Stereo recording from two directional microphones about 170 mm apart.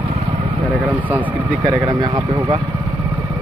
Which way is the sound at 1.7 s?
20° right (ahead or behind).